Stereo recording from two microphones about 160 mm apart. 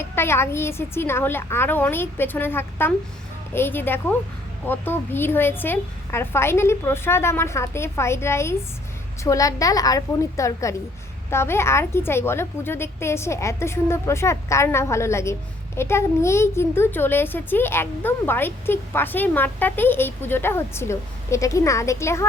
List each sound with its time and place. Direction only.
0.0 s a woman's voice: 15° left (ahead or behind)